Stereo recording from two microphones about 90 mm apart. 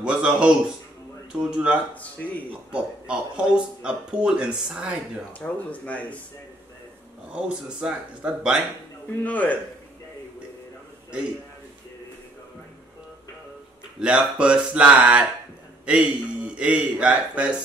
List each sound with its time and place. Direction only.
0.0 s speech: 10° right (ahead or behind)
2.0 s speech: 15° left (ahead or behind)
2.7 s speech: 10° right (ahead or behind)
5.4 s speech: 15° left (ahead or behind)
7.3 s speech: 10° right (ahead or behind)
9.2 s speech: 15° left (ahead or behind)
13.9 s speech: 10° right (ahead or behind)